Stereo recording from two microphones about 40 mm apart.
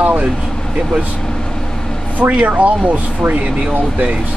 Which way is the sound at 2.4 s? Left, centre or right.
Right.